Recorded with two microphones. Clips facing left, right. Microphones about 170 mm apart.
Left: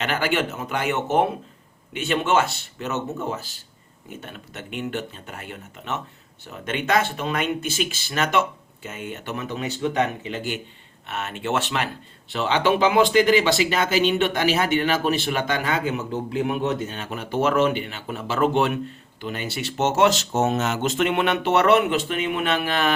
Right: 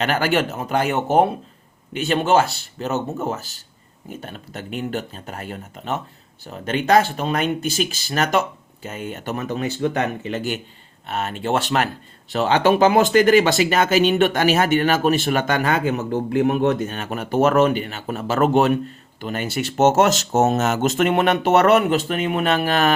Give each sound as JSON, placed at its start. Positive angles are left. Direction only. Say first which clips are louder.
{"t": 0.0, "sound": "speech", "louder": "right 4 dB", "side_deg": -40}